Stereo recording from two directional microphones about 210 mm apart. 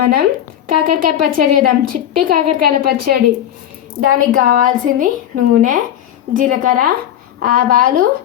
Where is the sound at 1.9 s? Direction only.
40° right (ahead or behind).